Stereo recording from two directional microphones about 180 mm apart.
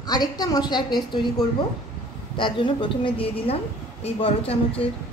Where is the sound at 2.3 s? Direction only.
25° left (ahead or behind).